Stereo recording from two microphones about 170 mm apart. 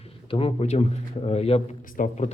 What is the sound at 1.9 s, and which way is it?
Speech, 50° left (ahead or behind).